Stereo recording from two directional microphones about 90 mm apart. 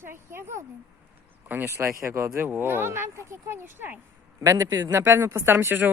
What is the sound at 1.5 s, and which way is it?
Speech, 25° right (ahead or behind).